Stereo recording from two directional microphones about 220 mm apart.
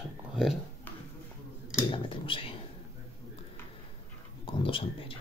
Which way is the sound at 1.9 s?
25° left (ahead or behind).